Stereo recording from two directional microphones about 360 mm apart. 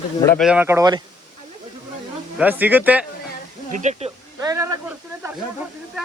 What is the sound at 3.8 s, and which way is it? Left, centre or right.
Speech, centre.